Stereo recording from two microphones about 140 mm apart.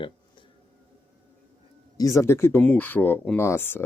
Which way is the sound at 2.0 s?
20° left (ahead or behind).